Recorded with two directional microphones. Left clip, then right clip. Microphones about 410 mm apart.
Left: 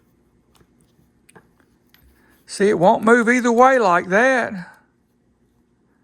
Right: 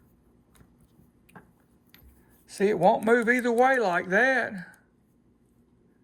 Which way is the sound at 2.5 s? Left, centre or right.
Centre.